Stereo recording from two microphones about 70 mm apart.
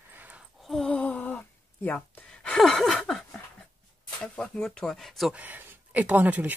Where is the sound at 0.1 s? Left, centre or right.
Right.